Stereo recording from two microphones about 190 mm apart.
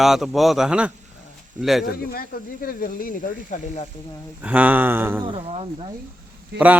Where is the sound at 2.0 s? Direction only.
50° left (ahead or behind).